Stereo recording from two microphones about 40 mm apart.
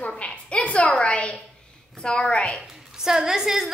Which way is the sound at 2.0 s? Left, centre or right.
Left.